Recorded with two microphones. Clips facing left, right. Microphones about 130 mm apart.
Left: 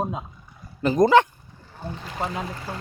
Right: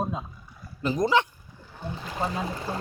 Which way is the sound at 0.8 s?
55° left (ahead or behind).